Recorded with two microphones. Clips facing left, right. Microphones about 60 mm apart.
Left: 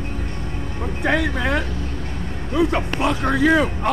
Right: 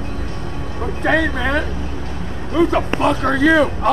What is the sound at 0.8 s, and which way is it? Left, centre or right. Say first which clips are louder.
Speech: right 4 dB; centre.